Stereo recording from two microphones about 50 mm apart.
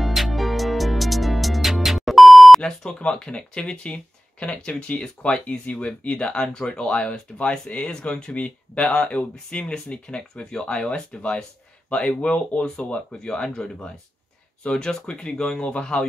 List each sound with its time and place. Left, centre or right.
0.0 s music: centre
2.6 s speech: centre